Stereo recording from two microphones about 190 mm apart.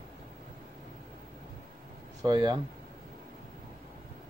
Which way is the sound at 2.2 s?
20° right (ahead or behind).